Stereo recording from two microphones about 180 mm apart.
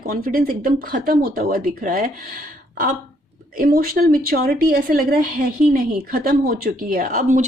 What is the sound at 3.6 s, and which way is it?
A woman's voice, 55° right (ahead or behind).